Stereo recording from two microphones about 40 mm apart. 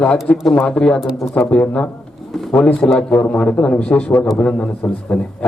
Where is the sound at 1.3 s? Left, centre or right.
Left.